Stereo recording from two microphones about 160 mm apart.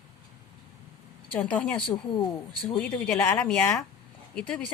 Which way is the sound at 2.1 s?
30° left (ahead or behind).